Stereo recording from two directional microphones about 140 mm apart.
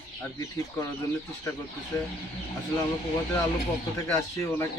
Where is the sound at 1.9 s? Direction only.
20° left (ahead or behind).